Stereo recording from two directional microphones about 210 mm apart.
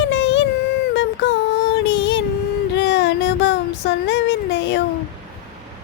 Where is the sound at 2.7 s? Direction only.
55° left (ahead or behind).